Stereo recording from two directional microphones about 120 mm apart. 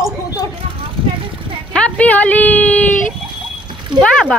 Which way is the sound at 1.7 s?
10° left (ahead or behind).